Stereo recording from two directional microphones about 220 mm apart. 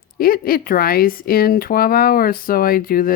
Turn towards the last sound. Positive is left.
turn(degrees=40)  # may be behind; listen again after turning